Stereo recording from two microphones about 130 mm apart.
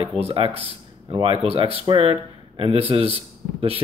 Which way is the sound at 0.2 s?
45° right (ahead or behind).